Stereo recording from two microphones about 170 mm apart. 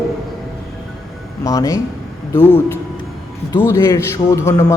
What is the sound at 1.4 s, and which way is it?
A man's voice, 20° left (ahead or behind).